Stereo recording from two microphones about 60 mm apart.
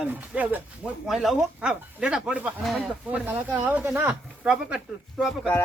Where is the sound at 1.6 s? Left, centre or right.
Centre.